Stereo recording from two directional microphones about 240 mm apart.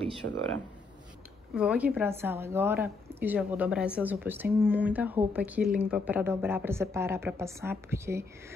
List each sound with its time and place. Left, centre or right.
0.2 s speech: right
1.5 s a woman's voice: centre